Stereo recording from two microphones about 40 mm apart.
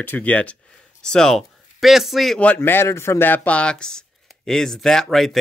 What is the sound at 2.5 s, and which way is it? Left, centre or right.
Speech, left.